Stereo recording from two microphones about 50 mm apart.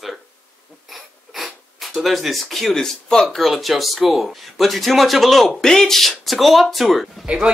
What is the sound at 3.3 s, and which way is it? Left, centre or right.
Speech, centre.